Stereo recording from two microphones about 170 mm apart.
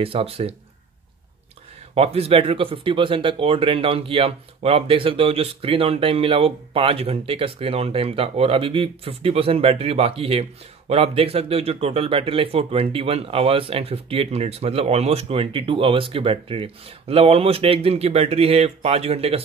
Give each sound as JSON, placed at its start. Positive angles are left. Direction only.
{"t": 0.0, "sound": "speech", "side_deg": -35}
{"t": 2.0, "sound": "speech", "side_deg": -35}